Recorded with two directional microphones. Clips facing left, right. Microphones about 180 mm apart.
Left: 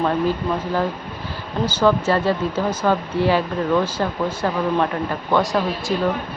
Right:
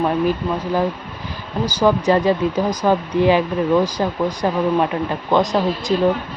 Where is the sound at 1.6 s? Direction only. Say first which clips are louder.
Right 2 dB; 15° right (ahead or behind).